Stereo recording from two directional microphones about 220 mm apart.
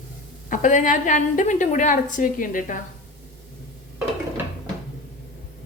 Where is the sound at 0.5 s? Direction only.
35° left (ahead or behind).